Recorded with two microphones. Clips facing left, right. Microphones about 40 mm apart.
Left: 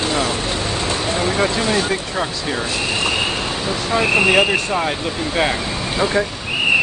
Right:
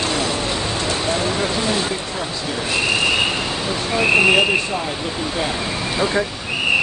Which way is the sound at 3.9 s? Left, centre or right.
Left.